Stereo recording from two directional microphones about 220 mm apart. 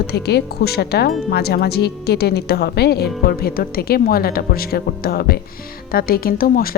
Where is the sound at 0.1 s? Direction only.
45° left (ahead or behind).